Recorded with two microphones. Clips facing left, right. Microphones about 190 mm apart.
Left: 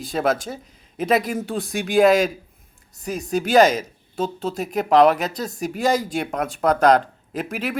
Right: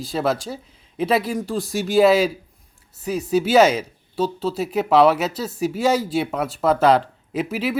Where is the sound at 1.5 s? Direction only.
Centre (ahead or behind).